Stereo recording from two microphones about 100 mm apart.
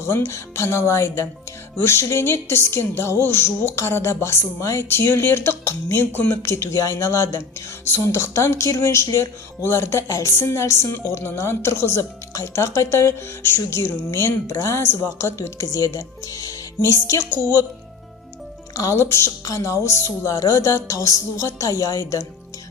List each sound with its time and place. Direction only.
0.1 s a woman's voice: 25° left (ahead or behind)
18.7 s speech: 30° left (ahead or behind)